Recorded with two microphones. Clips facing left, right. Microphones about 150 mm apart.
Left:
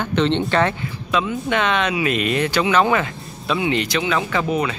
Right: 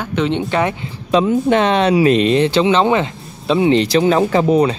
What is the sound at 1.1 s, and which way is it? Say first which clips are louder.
Speech: right 8 dB; 35° right (ahead or behind).